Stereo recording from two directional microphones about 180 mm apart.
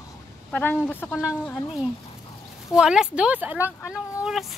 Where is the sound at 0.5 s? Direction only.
5° left (ahead or behind).